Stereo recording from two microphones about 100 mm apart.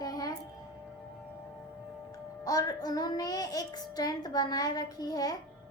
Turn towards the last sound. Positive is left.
turn(degrees=40)  # may be behind; listen again after turning